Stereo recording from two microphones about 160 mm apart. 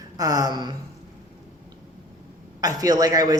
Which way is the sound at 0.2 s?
25° right (ahead or behind).